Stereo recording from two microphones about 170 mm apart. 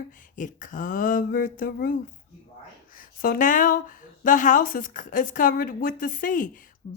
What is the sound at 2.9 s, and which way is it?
Speech, 55° left (ahead or behind).